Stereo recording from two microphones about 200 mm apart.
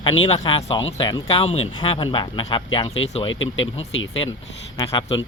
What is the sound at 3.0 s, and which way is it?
Speech, 75° left (ahead or behind).